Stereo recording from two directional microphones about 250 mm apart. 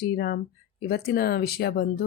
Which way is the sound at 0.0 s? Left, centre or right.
Left.